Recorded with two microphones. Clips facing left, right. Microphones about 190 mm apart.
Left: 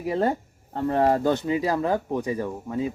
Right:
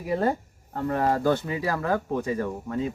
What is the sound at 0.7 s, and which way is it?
Speech, 30° left (ahead or behind).